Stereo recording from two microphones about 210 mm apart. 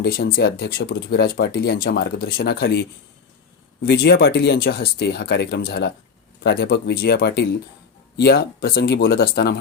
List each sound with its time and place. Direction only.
0.0 s speech: 45° left (ahead or behind)
3.8 s speech: 50° left (ahead or behind)